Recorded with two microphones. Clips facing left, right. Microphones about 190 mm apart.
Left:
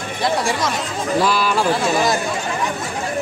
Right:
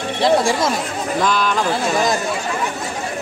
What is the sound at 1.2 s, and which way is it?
Speech, 5° left (ahead or behind).